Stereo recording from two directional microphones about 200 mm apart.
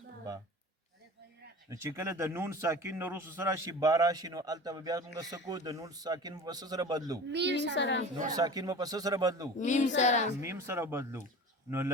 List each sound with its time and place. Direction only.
1.7 s a man's voice: 15° right (ahead or behind)
7.3 s a woman's voice: 60° right (ahead or behind)
7.7 s a woman's voice: 65° left (ahead or behind)
8.3 s a man's voice: 20° right (ahead or behind)
9.6 s a woman's voice: 35° left (ahead or behind)
10.4 s speech: 15° right (ahead or behind)